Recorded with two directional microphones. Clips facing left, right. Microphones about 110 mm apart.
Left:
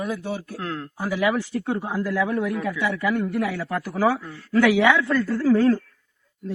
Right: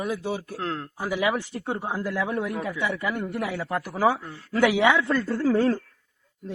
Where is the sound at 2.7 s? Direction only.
20° right (ahead or behind).